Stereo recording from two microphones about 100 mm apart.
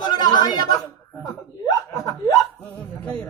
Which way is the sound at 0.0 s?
45° left (ahead or behind).